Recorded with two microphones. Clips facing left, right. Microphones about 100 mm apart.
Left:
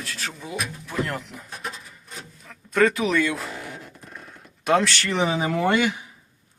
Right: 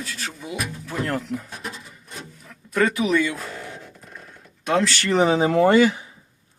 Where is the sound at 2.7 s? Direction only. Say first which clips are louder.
Even; 5° right (ahead or behind).